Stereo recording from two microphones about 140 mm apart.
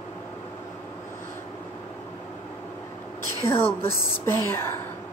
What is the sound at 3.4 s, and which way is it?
Speech, 20° left (ahead or behind).